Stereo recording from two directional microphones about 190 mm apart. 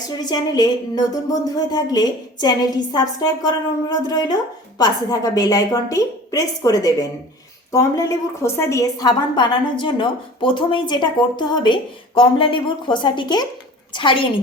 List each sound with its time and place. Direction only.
0.2 s a woman's voice: 20° left (ahead or behind)